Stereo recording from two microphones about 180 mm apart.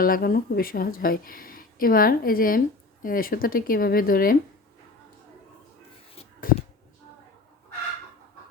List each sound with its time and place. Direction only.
0.0 s a woman's voice: 55° left (ahead or behind)
6.4 s a woman's voice: 55° left (ahead or behind)